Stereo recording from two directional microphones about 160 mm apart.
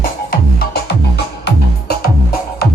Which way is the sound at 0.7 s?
85° left.